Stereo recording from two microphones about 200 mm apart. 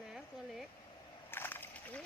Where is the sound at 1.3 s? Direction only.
10° left (ahead or behind).